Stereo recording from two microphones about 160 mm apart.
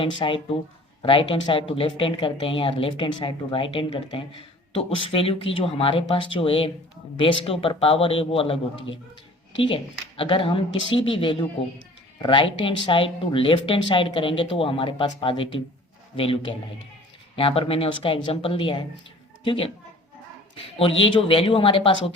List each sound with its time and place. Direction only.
0.0 s speech: 35° left (ahead or behind)
20.7 s speech: 35° left (ahead or behind)